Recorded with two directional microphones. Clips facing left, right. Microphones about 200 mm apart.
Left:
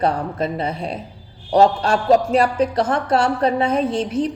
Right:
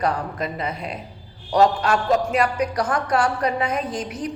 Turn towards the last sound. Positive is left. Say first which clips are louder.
# left 8 dB
turn(degrees=30)  # may be behind; listen again after turning